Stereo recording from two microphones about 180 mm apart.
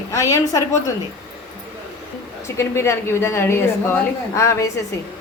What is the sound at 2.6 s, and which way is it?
A woman's voice, 15° left (ahead or behind).